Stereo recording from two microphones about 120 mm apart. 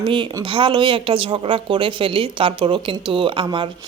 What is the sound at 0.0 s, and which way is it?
A woman's voice, 45° right (ahead or behind).